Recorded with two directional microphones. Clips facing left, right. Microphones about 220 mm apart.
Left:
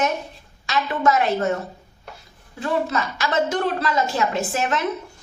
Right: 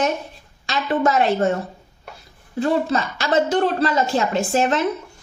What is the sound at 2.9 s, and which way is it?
A woman's voice, 30° right (ahead or behind).